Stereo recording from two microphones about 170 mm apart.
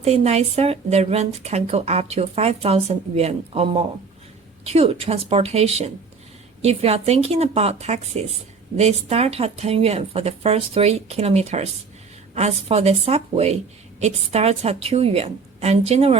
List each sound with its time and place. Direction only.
0.0 s a woman's voice: 40° right (ahead or behind)